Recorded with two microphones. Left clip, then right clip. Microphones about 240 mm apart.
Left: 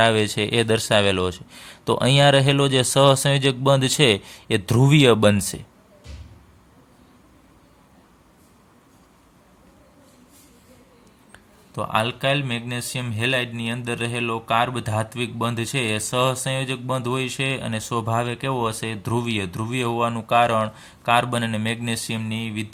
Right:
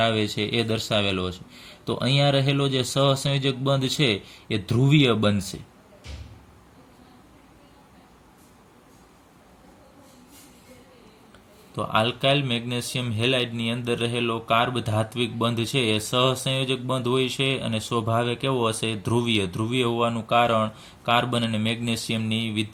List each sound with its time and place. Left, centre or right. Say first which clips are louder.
0.0 s speech: left 5 dB; left
11.7 s a man's voice: left 1 dB; left